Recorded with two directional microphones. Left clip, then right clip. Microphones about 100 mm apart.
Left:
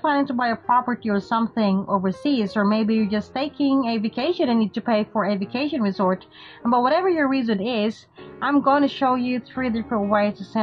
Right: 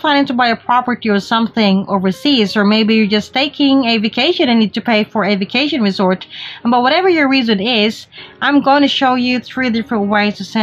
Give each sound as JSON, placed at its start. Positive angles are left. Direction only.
{"t": 0.0, "sound": "a woman's voice", "side_deg": -40}
{"t": 9.8, "sound": "a woman's voice", "side_deg": -40}
{"t": 10.1, "sound": "a woman's voice", "side_deg": -15}